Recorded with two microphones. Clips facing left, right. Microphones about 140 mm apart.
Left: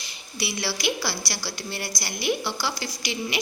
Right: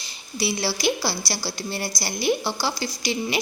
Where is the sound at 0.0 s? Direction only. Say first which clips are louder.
Right 5 dB; 30° right (ahead or behind).